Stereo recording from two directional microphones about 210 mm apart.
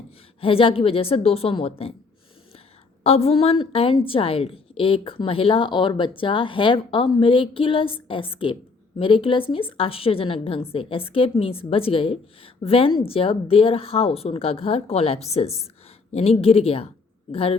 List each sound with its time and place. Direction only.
0.4 s a woman's voice: 25° left (ahead or behind)
3.0 s a woman's voice: 30° left (ahead or behind)